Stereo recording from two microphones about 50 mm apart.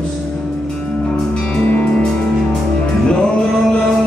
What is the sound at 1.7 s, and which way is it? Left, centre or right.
Music, left.